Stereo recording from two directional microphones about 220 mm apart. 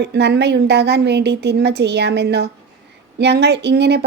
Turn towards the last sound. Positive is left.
turn(degrees=-50)  # may be behind; listen again after turning